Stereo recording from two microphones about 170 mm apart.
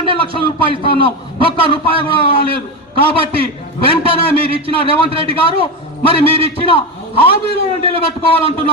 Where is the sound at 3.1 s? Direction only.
35° right (ahead or behind).